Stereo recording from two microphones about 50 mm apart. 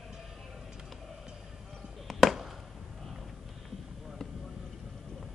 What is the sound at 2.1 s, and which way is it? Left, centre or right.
Chop, centre.